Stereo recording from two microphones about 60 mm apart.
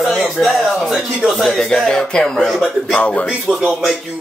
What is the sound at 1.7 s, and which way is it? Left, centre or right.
Speech, centre.